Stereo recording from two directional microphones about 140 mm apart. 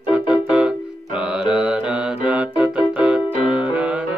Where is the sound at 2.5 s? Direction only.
10° right (ahead or behind).